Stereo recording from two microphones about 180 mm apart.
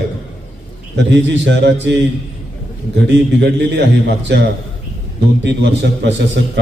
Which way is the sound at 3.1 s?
75° right (ahead or behind).